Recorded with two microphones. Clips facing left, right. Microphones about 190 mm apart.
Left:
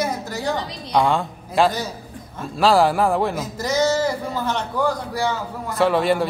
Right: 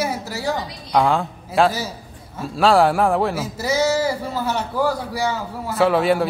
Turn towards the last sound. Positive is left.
turn(degrees=0)  # may be behind; listen again after turning